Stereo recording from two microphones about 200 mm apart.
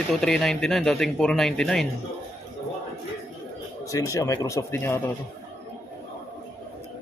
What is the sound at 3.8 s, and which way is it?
Speech, 15° left (ahead or behind).